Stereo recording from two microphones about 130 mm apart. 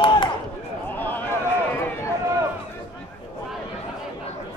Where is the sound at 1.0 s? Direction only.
15° left (ahead or behind).